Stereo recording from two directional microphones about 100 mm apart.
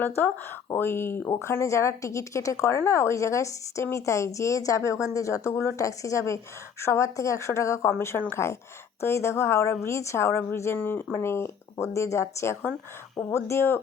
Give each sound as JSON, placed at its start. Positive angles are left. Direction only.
{"t": 0.0, "sound": "speech", "side_deg": 20}